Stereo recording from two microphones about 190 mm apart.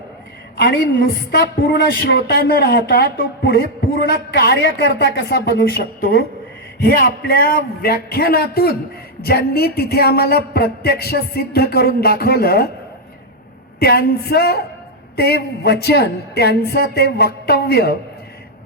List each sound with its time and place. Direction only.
0.5 s a woman's voice: 55° left (ahead or behind)
13.7 s a woman's voice: 55° left (ahead or behind)